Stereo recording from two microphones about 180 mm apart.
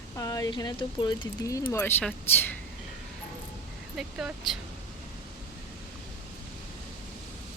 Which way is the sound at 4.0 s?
Centre (ahead or behind).